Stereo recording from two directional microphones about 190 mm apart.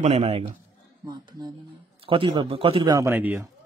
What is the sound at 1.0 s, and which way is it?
A man's voice, 20° right (ahead or behind).